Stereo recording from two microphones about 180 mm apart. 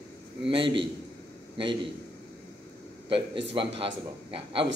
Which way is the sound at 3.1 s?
30° right (ahead or behind).